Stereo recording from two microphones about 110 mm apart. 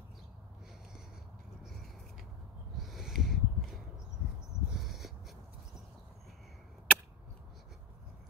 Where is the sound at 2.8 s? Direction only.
Centre (ahead or behind).